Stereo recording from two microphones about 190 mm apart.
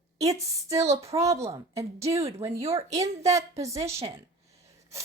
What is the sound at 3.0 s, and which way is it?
A woman's voice, 15° right (ahead or behind).